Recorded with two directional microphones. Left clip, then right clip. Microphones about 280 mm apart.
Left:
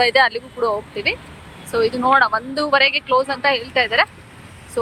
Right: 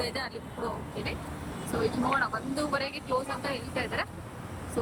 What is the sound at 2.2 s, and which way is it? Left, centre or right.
Speech, left.